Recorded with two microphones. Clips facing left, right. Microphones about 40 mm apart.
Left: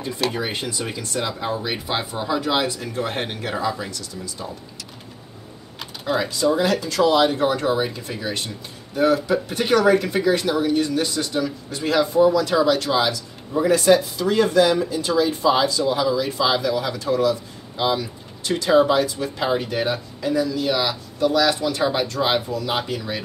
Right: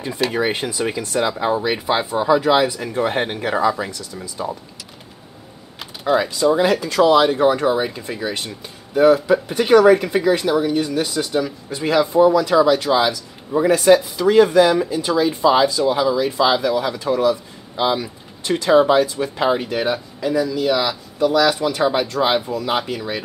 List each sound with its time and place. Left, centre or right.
0.3 s speech: right
5.8 s typing: centre
6.5 s speech: centre
7.3 s speech: right
13.7 s speech: centre
14.1 s speech: right; by 21.5 s centre
21.5 s speech: centre